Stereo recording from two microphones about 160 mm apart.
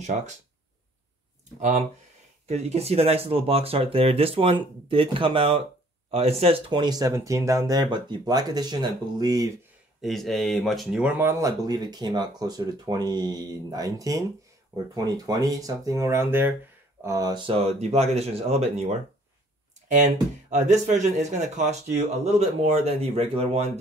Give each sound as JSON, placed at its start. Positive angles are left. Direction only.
{"t": 1.6, "sound": "speech", "side_deg": -50}
{"t": 10.0, "sound": "speech", "side_deg": 0}